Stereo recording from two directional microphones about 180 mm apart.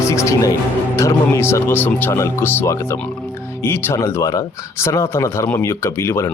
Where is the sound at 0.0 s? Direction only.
15° left (ahead or behind).